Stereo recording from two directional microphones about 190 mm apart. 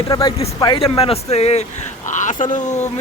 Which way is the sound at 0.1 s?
20° left (ahead or behind).